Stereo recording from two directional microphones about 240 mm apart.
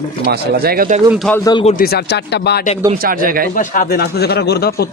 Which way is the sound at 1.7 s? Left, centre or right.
Left.